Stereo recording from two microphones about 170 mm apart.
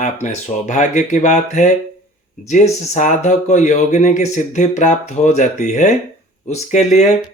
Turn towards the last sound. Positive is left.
turn(degrees=40)  # may be behind; listen again after turning